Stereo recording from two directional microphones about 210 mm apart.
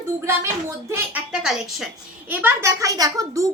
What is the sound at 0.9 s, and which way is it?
A woman's voice, 5° right (ahead or behind).